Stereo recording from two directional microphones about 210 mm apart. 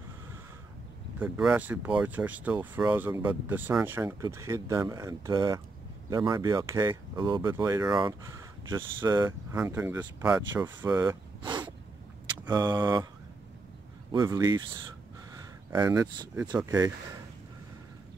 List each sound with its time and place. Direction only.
1.2 s speech: 10° right (ahead or behind)
14.1 s speech: 15° right (ahead or behind)